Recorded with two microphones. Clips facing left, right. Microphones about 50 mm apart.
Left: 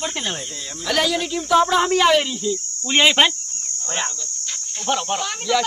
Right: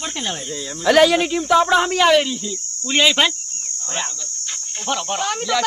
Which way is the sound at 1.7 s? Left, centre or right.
Centre.